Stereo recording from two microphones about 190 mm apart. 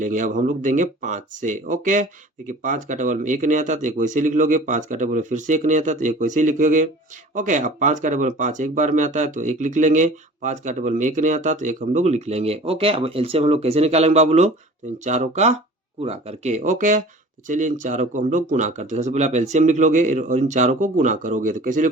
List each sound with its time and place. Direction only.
0.0 s speech: 40° right (ahead or behind)